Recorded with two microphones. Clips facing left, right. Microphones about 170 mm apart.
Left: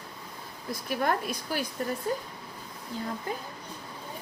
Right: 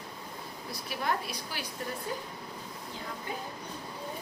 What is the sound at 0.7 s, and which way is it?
A woman's voice, 50° left (ahead or behind).